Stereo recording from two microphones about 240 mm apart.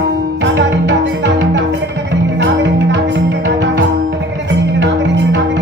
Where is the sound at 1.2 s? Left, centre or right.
Right.